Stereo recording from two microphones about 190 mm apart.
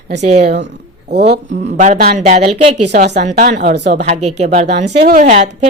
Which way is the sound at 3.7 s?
65° right (ahead or behind).